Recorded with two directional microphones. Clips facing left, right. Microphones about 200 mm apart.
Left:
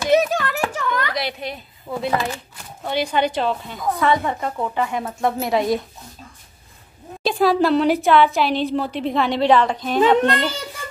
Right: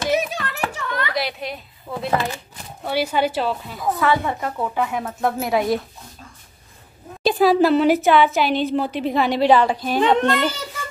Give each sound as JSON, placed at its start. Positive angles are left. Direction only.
{"t": 0.4, "sound": "a sound", "side_deg": 45}
{"t": 1.1, "sound": "a woman's voice", "side_deg": 0}
{"t": 7.2, "sound": "a woman's voice", "side_deg": 0}